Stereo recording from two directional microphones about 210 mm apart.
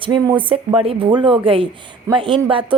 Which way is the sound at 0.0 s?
20° right (ahead or behind).